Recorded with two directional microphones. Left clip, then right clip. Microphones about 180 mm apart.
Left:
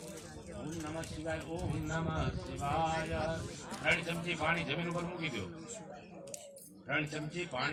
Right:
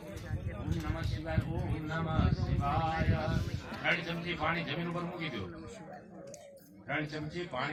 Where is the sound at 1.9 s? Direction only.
40° left (ahead or behind).